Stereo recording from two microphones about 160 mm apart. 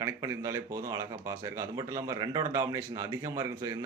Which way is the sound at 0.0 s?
20° right (ahead or behind).